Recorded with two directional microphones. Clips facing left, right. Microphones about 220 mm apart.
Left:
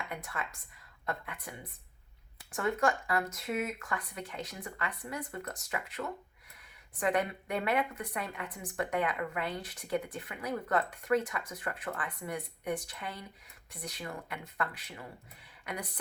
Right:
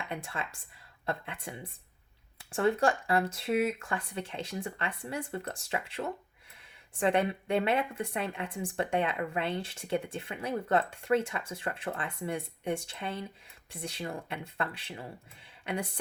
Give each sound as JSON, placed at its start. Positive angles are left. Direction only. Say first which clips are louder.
{"t": 0.1, "sound": "a woman's voice", "louder": "right 2 dB", "side_deg": -30}